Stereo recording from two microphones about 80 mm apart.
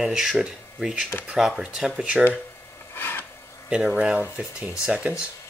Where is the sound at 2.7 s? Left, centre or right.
Left.